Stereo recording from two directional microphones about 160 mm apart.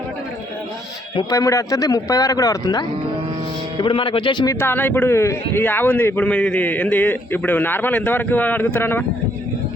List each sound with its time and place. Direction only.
1.1 s speech: 20° left (ahead or behind)
4.6 s speech: 15° left (ahead or behind)